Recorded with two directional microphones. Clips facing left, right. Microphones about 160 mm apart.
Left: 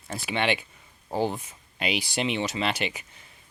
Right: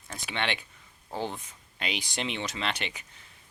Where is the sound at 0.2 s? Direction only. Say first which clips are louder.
Left 6 dB; 10° left (ahead or behind).